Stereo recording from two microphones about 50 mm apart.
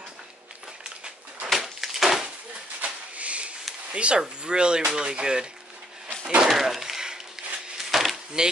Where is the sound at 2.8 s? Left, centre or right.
Right.